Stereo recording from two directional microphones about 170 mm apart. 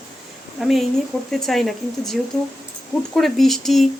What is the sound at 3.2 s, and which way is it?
Speech, centre (ahead or behind).